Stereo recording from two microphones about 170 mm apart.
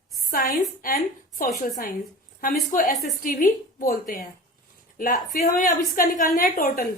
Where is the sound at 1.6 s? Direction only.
50° left (ahead or behind).